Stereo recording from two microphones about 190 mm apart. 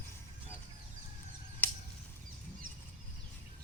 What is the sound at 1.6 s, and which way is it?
Bird flight, 10° left (ahead or behind).